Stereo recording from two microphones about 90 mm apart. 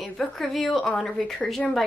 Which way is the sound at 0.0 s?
5° left (ahead or behind).